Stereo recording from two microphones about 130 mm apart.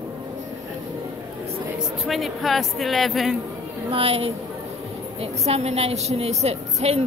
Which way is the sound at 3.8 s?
45° right (ahead or behind).